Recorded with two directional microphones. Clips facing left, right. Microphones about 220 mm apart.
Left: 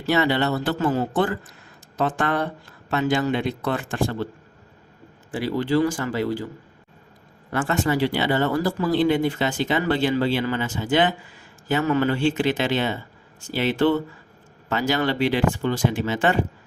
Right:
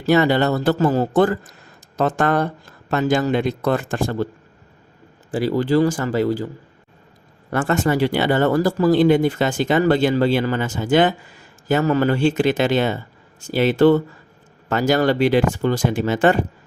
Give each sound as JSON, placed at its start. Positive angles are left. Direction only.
{"t": 0.0, "sound": "speech", "side_deg": -45}
{"t": 5.3, "sound": "speech", "side_deg": -40}
{"t": 7.5, "sound": "speech", "side_deg": -50}